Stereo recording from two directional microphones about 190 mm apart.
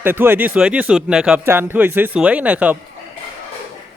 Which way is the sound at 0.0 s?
10° right (ahead or behind).